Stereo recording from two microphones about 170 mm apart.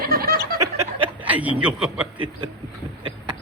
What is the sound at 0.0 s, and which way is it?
Snicker, 60° right (ahead or behind).